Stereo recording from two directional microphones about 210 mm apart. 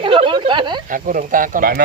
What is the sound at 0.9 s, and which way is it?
Speech, 40° right (ahead or behind).